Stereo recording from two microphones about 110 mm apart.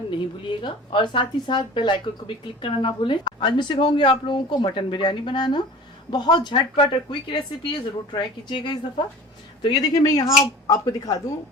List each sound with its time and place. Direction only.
0.1 s speech: 45° left (ahead or behind)